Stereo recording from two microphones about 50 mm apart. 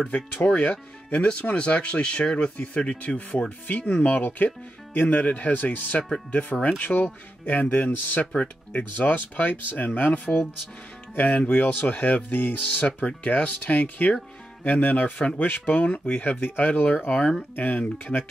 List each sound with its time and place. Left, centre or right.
0.6 s speech: left
4.2 s speech: left
17.2 s speech: centre
17.6 s speech: left